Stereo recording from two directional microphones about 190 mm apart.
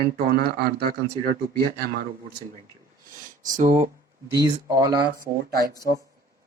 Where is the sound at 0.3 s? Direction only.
55° right (ahead or behind).